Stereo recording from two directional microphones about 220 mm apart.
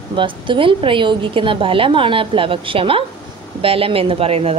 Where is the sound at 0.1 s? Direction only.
20° right (ahead or behind).